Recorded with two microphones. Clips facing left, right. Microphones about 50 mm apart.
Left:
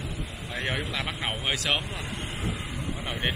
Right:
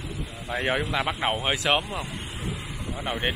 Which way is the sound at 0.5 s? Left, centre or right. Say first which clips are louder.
Right 5 dB; centre.